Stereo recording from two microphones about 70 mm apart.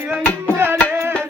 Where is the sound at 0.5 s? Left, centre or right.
Right.